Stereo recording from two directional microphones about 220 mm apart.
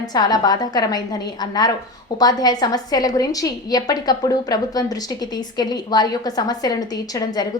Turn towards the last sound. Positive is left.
turn(degrees=15)  # may be behind; listen again after turning